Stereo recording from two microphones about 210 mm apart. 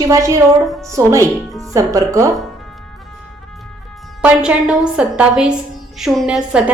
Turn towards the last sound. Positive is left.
turn(degrees=-5)  # may be behind; listen again after turning